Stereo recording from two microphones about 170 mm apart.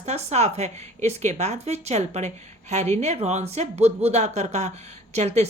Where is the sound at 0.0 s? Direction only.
40° right (ahead or behind).